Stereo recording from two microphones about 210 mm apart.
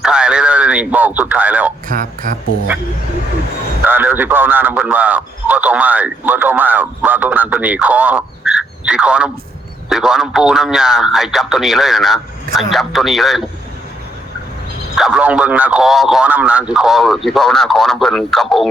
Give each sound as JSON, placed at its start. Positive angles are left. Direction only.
{"t": 0.0, "sound": "a sound", "side_deg": -5}
{"t": 1.9, "sound": "speech", "side_deg": -40}
{"t": 3.8, "sound": "a man's voice", "side_deg": -10}
{"t": 14.9, "sound": "a man's voice", "side_deg": -5}